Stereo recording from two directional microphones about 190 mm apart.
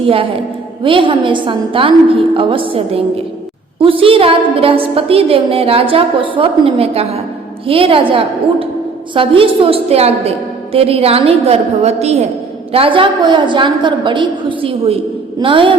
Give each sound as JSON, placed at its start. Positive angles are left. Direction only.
{"t": 0.0, "sound": "a woman's voice", "side_deg": -30}